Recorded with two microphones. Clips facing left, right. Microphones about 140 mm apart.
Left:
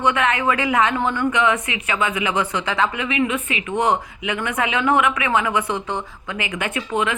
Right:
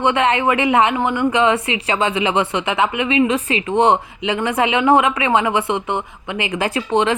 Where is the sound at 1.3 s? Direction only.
30° right (ahead or behind).